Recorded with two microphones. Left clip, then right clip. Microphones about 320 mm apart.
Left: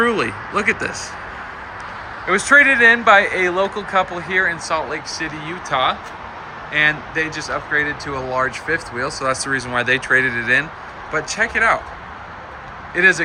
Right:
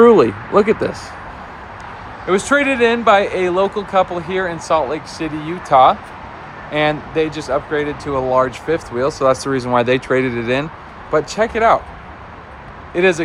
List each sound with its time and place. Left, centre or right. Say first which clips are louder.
0.0 s speech: right 9 dB; centre
2.2 s speech: left 3 dB; centre
9.6 s speech: right 3 dB; centre
13.0 s speech: left 1 dB; centre